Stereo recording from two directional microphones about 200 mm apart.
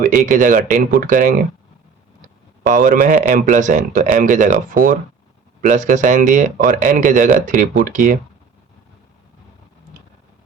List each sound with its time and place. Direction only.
0.0 s speech: 40° right (ahead or behind)
2.6 s speech: 40° right (ahead or behind)